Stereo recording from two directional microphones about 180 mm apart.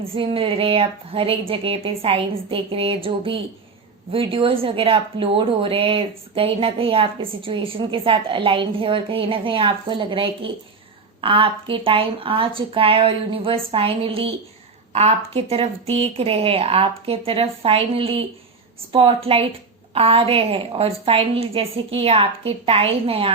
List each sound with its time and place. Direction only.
0.0 s a woman's voice: 30° right (ahead or behind)